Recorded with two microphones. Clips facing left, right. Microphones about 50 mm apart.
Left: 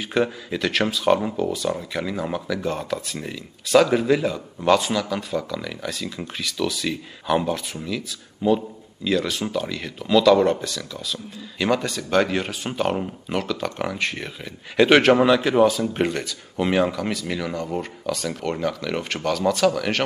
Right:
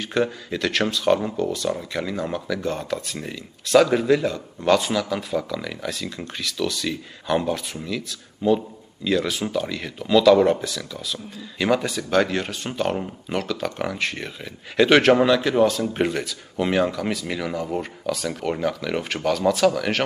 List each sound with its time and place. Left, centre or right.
0.0 s speech: centre